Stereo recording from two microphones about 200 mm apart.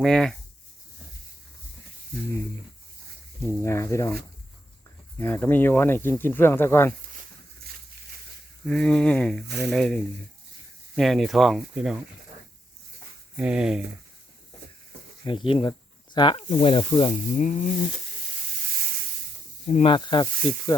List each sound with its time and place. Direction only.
0.0 s speech: 5° left (ahead or behind)
3.4 s speech: 15° left (ahead or behind)
8.6 s speech: 5° left (ahead or behind)
13.3 s speech: 5° right (ahead or behind)
15.2 s speech: 25° left (ahead or behind)
19.6 s speech: 30° left (ahead or behind)